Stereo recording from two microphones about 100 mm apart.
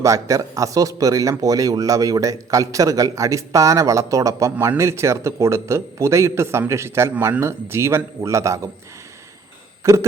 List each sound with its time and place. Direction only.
0.0 s a man's voice: 35° right (ahead or behind)
4.5 s a man's voice: 15° right (ahead or behind)
4.8 s a man's voice: 30° right (ahead or behind)
9.8 s a sound: 30° right (ahead or behind)